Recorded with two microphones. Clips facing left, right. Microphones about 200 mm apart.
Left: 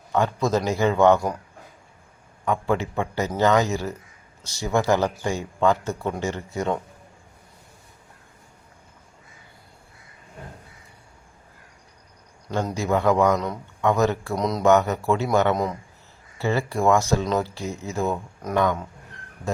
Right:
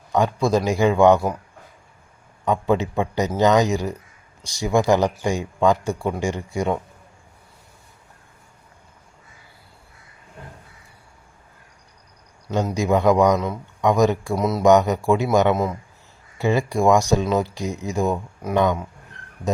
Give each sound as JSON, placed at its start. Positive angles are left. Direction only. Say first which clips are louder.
{"t": 0.1, "sound": "speech", "louder": "right 3 dB", "side_deg": -15}
{"t": 2.4, "sound": "speech", "louder": "right 3 dB", "side_deg": -20}
{"t": 12.5, "sound": "speech", "louder": "right 3 dB", "side_deg": -15}
{"t": 14.6, "sound": "speech", "louder": "right 3 dB", "side_deg": -15}